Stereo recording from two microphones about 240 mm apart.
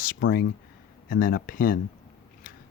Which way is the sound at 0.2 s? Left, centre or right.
Left.